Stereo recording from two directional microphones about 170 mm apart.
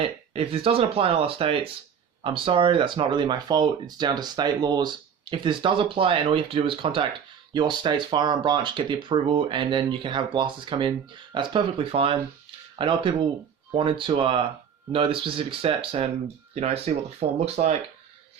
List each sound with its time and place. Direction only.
0.3 s speech: 35° right (ahead or behind)